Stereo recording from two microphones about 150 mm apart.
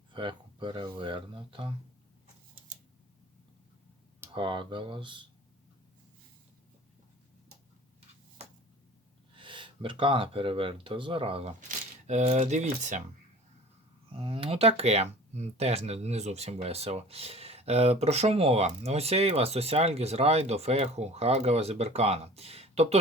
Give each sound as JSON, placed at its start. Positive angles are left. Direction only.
{"t": 0.1, "sound": "speech", "side_deg": -30}
{"t": 4.4, "sound": "speech", "side_deg": -35}
{"t": 9.3, "sound": "speech", "side_deg": -30}
{"t": 14.2, "sound": "speech", "side_deg": -40}